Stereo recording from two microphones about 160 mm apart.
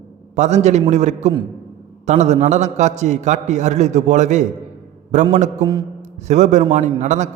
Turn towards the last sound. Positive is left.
turn(degrees=-50)  # may be behind; listen again after turning